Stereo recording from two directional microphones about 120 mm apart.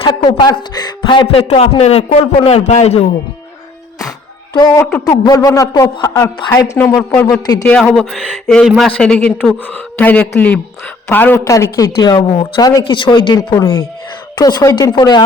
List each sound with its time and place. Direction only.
0.0 s speech: 35° left (ahead or behind); by 3.1 s 65° left (ahead or behind)
5.0 s speech: 30° left (ahead or behind); by 8.9 s 5° right (ahead or behind)
8.9 s a man's voice: 10° left (ahead or behind); by 12.2 s 30° left (ahead or behind)
12.3 s speech: 45° left (ahead or behind)